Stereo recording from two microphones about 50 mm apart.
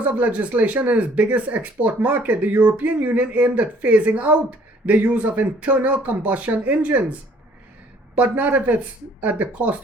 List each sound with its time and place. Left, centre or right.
0.1 s speech: right
8.1 s speech: right